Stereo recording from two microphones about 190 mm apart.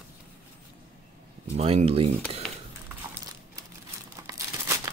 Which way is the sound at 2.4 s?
Centre (ahead or behind).